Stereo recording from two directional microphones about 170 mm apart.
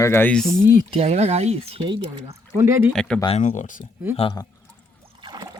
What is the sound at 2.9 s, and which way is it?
Speech, 5° left (ahead or behind).